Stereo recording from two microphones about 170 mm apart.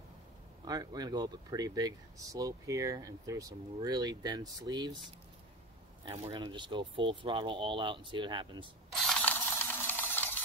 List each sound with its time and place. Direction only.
0.7 s speech: 20° right (ahead or behind)
6.0 s speech: 30° right (ahead or behind)
9.0 s coin: 5° left (ahead or behind)